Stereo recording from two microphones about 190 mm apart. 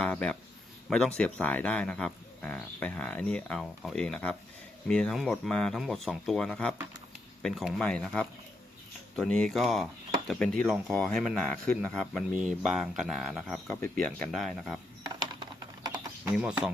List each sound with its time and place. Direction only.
0.0 s speech: 5° left (ahead or behind)
15.0 s typing: 20° right (ahead or behind)
16.3 s speech: 5° right (ahead or behind)